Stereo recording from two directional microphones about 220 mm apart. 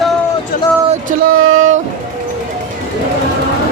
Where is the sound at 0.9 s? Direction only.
35° right (ahead or behind).